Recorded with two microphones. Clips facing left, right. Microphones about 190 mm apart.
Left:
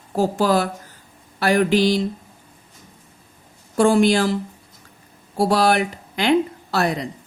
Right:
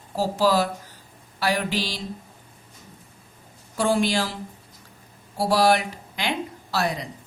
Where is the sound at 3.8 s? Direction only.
55° left (ahead or behind).